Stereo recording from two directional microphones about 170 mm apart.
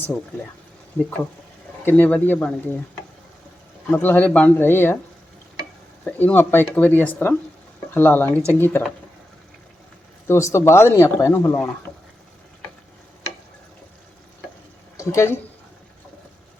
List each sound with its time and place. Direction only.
1.8 s speech: 10° left (ahead or behind)
3.9 s speech: 10° left (ahead or behind)
6.1 s speech: 10° left (ahead or behind)
10.2 s speech: 15° left (ahead or behind)
14.9 s speech: 15° left (ahead or behind)